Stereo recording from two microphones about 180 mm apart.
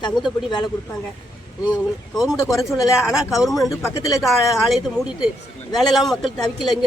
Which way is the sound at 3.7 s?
20° left (ahead or behind).